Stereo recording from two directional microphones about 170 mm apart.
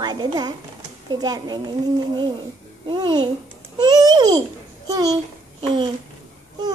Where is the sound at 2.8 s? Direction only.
25° right (ahead or behind).